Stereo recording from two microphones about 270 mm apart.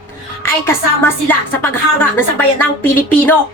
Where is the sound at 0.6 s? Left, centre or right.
Centre.